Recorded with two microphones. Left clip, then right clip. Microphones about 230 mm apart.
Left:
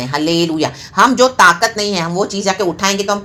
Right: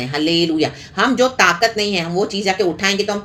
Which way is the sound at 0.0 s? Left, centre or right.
Centre.